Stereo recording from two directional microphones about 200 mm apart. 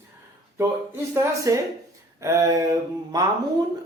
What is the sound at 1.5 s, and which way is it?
A man's voice, 15° right (ahead or behind).